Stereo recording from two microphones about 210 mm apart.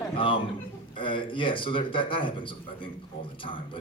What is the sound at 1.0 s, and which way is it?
A man's voice, 25° left (ahead or behind).